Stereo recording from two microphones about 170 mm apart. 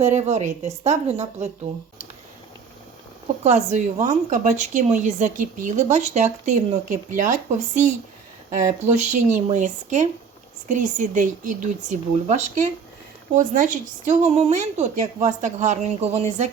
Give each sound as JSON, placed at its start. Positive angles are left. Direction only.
{"t": 0.0, "sound": "a woman's voice", "side_deg": -40}
{"t": 3.4, "sound": "speech", "side_deg": -45}